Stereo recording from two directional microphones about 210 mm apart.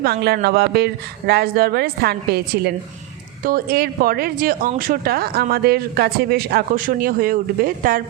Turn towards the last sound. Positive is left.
turn(degrees=-40)  # may be behind; listen again after turning